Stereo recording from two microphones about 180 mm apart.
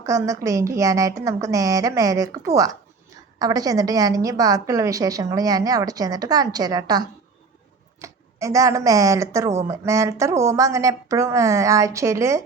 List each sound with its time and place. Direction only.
0.0 s a woman's voice: 20° right (ahead or behind)
8.0 s a woman's voice: 15° right (ahead or behind)